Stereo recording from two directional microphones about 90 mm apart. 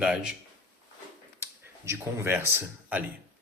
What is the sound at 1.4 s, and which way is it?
Speech, 30° right (ahead or behind).